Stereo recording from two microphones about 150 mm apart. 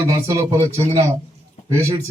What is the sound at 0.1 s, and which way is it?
Speech, 20° right (ahead or behind).